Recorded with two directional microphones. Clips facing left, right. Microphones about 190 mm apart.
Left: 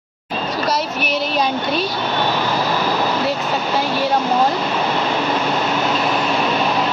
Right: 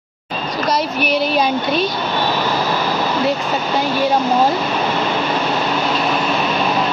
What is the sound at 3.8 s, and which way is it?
Speech, centre (ahead or behind).